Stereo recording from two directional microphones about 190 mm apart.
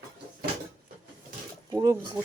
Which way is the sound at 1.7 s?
20° right (ahead or behind).